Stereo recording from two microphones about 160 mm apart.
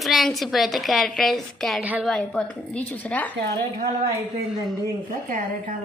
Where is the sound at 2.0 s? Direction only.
5° left (ahead or behind).